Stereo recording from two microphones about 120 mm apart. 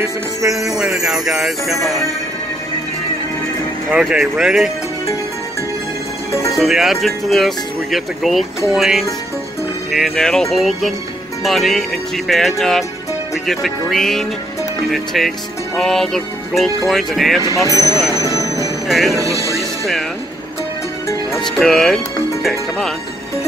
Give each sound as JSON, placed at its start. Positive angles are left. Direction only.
{"t": 0.0, "sound": "music", "side_deg": -25}
{"t": 0.7, "sound": "speech", "side_deg": -5}
{"t": 3.9, "sound": "speech", "side_deg": -5}
{"t": 6.3, "sound": "music", "side_deg": 25}
{"t": 6.6, "sound": "speech", "side_deg": -5}
{"t": 17.6, "sound": "speech", "side_deg": -30}
{"t": 18.2, "sound": "music", "side_deg": 25}
{"t": 18.9, "sound": "speech", "side_deg": 0}
{"t": 21.5, "sound": "speech", "side_deg": 0}